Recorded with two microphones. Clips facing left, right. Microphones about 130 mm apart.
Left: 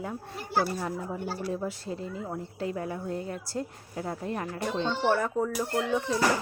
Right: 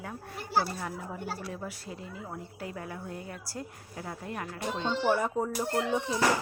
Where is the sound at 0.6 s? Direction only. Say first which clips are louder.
Left 3 dB; 5° left (ahead or behind).